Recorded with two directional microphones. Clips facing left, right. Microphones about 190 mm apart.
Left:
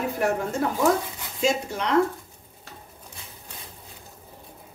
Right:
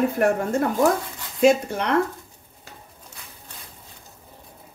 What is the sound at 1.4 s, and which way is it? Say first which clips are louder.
Speech: right 7 dB; 60° right (ahead or behind).